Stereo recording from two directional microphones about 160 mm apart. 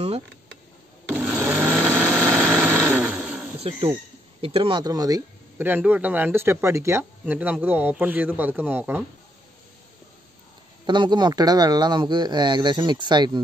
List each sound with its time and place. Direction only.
1.1 s vacuum cleaner: 10° right (ahead or behind)
1.8 s a sound: 10° right (ahead or behind)
3.5 s speech: 40° right (ahead or behind)
5.6 s speech: 10° right (ahead or behind)
10.9 s speech: 30° right (ahead or behind)